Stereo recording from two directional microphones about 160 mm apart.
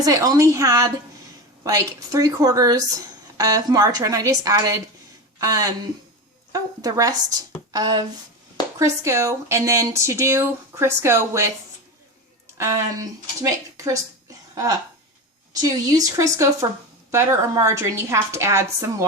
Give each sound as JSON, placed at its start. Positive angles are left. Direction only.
{"t": 0.0, "sound": "a woman's voice", "side_deg": -20}
{"t": 12.5, "sound": "a woman's voice", "side_deg": -20}